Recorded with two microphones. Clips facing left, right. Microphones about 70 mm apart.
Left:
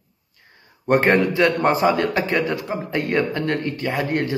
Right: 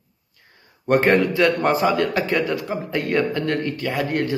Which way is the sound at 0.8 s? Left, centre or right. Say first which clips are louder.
Even; centre.